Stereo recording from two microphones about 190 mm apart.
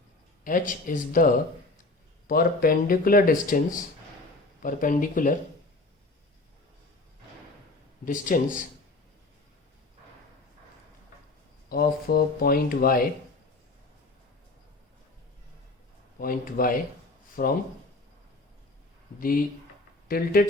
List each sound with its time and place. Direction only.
0.4 s speech: 45° left (ahead or behind)
8.0 s speech: 45° left (ahead or behind)
11.7 s speech: 55° left (ahead or behind)
16.1 s speech: 50° left (ahead or behind)
19.2 s speech: 50° left (ahead or behind)